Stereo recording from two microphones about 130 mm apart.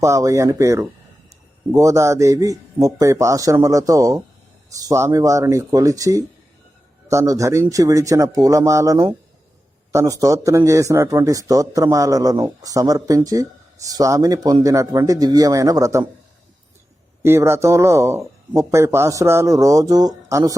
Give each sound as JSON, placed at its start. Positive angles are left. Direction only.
{"t": 0.0, "sound": "speech", "side_deg": -25}
{"t": 17.2, "sound": "speech", "side_deg": -20}